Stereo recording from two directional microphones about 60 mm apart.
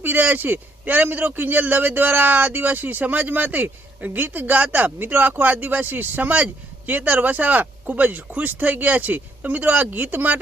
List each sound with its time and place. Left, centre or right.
0.0 s a man's voice: right